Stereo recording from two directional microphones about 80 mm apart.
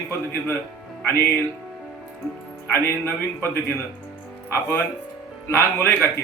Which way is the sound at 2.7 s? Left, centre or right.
Left.